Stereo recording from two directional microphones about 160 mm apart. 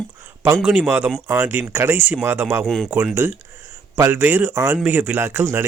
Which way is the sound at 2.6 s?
Centre (ahead or behind).